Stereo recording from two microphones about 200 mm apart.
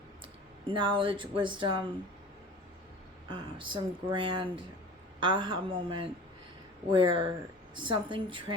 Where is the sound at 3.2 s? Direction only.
25° right (ahead or behind).